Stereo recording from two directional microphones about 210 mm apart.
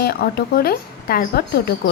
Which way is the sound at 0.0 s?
50° left (ahead or behind).